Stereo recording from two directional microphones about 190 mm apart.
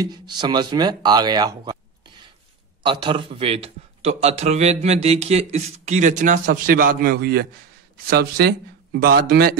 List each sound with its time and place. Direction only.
0.0 s a man's voice: 20° right (ahead or behind); by 9.6 s 55° right (ahead or behind)